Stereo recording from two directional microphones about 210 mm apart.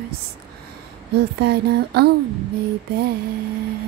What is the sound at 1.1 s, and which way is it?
Female singing, 50° right (ahead or behind).